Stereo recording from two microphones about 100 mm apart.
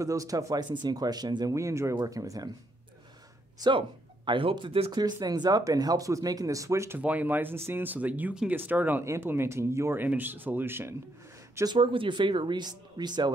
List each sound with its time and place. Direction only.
0.0 s speech: 35° right (ahead or behind)
1.5 s speech: 30° right (ahead or behind)
4.3 s a man's voice: 60° right (ahead or behind)
4.9 s speech: 45° right (ahead or behind)
7.0 s speech: 15° right (ahead or behind)
11.6 s speech: 55° right (ahead or behind)